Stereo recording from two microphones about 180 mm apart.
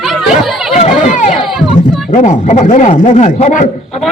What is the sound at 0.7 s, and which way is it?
Run, 40° left (ahead or behind).